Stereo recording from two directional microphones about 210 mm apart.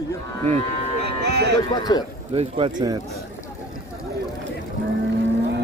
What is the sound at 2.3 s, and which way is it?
Speech, 25° right (ahead or behind).